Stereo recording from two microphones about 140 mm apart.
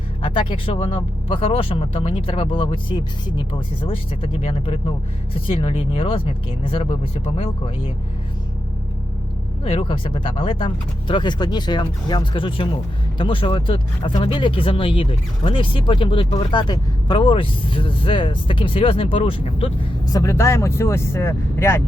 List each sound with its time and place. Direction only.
0.2 s speech: 35° left (ahead or behind)
9.6 s speech: 40° left (ahead or behind)
20.1 s speech: 25° left (ahead or behind)